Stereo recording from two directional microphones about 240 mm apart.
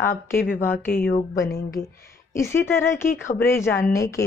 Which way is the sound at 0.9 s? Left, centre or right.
Left.